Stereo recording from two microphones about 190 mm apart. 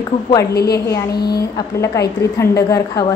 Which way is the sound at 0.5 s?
55° left (ahead or behind).